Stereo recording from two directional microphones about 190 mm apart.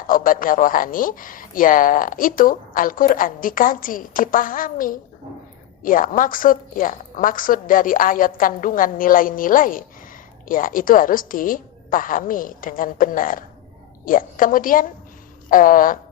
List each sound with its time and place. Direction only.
0.1 s a woman's voice: 45° left (ahead or behind)